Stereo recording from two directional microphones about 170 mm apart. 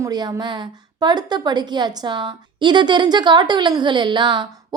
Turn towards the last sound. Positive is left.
turn(degrees=-25)  # may be behind; listen again after turning